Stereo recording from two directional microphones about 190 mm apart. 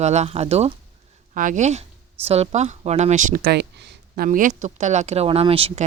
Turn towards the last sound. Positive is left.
turn(degrees=-30)  # may be behind; listen again after turning